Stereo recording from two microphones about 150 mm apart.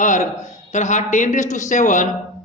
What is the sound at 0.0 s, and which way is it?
A man's voice, 55° left (ahead or behind).